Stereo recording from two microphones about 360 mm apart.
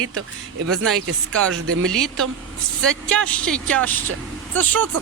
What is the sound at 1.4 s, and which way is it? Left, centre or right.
Speech, right.